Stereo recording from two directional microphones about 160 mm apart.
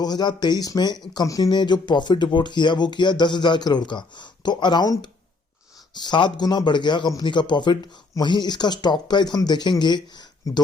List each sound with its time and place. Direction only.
0.0 s speech: 25° left (ahead or behind)